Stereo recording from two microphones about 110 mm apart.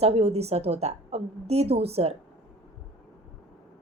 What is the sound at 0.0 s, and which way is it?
A woman's voice, 70° right (ahead or behind).